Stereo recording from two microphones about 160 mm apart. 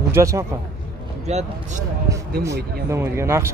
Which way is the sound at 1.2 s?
45° right (ahead or behind).